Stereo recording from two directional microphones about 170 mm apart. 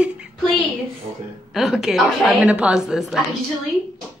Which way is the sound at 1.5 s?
5° right (ahead or behind).